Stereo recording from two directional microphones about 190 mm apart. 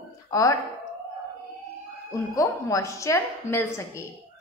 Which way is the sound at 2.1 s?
15° left (ahead or behind).